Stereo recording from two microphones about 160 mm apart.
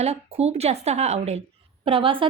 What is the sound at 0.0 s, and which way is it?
A woman's voice, 40° right (ahead or behind).